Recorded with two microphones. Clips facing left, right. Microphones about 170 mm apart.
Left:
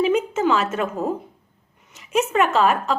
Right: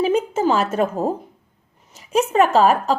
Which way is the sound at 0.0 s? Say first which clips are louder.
Right 1 dB; 35° right (ahead or behind).